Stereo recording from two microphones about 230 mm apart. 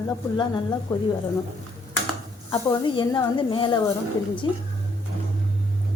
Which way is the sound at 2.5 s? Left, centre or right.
Centre.